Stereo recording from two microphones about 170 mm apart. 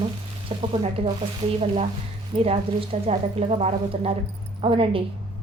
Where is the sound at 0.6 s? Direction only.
35° right (ahead or behind).